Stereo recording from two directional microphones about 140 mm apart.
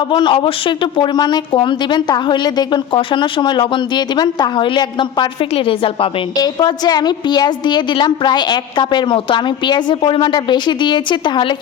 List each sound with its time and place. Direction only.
0.1 s speech: 35° left (ahead or behind)
6.3 s speech: 30° left (ahead or behind)